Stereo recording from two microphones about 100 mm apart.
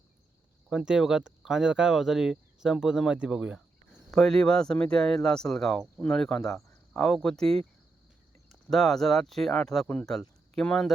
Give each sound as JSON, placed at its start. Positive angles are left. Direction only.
{"t": 0.7, "sound": "speech", "side_deg": -5}
{"t": 4.1, "sound": "speech", "side_deg": 5}
{"t": 8.7, "sound": "speech", "side_deg": 5}